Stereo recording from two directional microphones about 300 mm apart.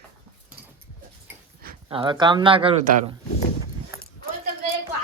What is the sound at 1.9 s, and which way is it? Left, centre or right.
A man's voice, centre.